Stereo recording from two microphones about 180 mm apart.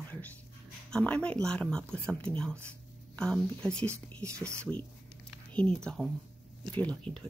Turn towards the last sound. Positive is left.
turn(degrees=5)  # may be behind; listen again after turning